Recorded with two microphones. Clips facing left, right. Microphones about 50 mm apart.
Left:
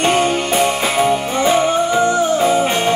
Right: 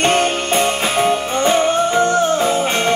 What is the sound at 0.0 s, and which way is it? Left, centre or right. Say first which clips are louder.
Music: left 1 dB; right.